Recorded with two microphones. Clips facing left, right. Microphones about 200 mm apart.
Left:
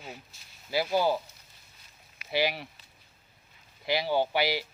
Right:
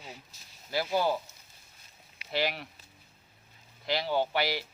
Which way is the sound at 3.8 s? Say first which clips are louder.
Left 2 dB; 10° left (ahead or behind).